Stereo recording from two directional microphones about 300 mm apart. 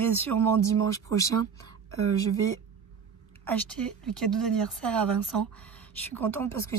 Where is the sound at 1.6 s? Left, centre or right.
Right.